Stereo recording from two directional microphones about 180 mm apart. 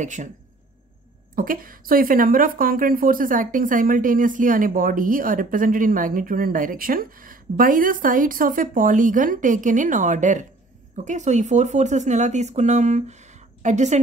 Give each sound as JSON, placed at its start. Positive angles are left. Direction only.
{"t": 0.0, "sound": "a woman's voice", "side_deg": -45}
{"t": 1.3, "sound": "a woman's voice", "side_deg": -50}